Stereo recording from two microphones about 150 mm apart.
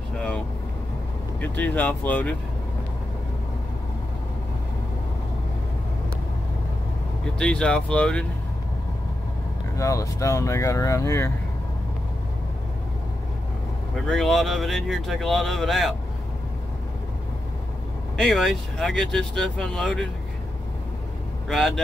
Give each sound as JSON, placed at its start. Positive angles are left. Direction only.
{"t": 1.4, "sound": "speech", "side_deg": 10}
{"t": 7.3, "sound": "speech", "side_deg": 5}
{"t": 9.8, "sound": "speech", "side_deg": 20}
{"t": 13.9, "sound": "speech", "side_deg": 0}
{"t": 18.1, "sound": "speech", "side_deg": 0}
{"t": 21.5, "sound": "speech", "side_deg": 0}